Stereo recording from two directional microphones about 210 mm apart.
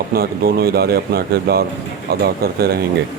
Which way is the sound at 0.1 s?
45° right (ahead or behind).